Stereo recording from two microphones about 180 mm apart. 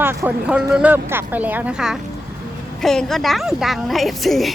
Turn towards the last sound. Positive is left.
turn(degrees=0)  # may be behind; listen again after turning